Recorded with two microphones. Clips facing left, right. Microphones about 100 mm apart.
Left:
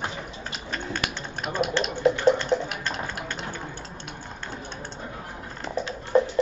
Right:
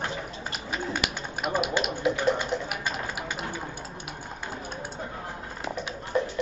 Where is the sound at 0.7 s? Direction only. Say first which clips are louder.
Right 1 dB; 10° right (ahead or behind).